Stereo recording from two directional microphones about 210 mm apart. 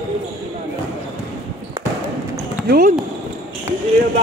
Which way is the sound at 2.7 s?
40° right (ahead or behind).